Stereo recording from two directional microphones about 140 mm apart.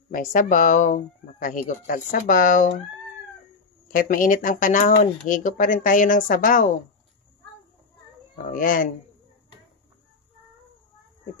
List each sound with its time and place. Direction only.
0.1 s speech: 70° left (ahead or behind)
3.9 s speech: 75° left (ahead or behind)
8.5 s speech: 75° left (ahead or behind)